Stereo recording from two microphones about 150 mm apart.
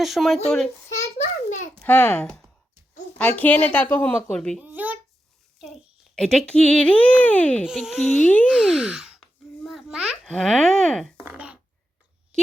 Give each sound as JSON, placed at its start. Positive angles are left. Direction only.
{"t": 0.0, "sound": "speech", "side_deg": 0}
{"t": 0.9, "sound": "a sound", "side_deg": 50}
{"t": 1.8, "sound": "speech", "side_deg": 10}
{"t": 4.6, "sound": "a sound", "side_deg": -10}
{"t": 6.1, "sound": "speech", "side_deg": 5}
{"t": 7.6, "sound": "speech", "side_deg": -5}
{"t": 8.4, "sound": "speech", "side_deg": -5}
{"t": 9.6, "sound": "babbling", "side_deg": 0}
{"t": 10.2, "sound": "speech", "side_deg": 5}
{"t": 11.3, "sound": "a sound", "side_deg": -10}